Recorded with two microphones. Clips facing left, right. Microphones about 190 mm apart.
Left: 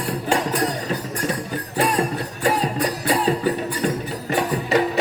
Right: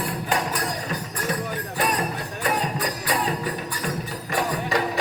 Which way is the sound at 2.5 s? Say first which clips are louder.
Left 5 dB; 30° left (ahead or behind).